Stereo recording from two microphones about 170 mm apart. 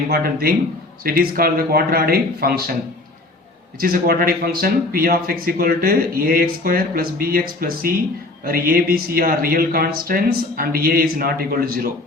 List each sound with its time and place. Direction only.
0.1 s speech: 65° right (ahead or behind)
3.8 s speech: 60° right (ahead or behind)